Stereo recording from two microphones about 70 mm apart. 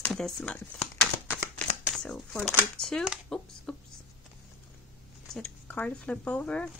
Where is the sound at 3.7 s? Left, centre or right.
Centre.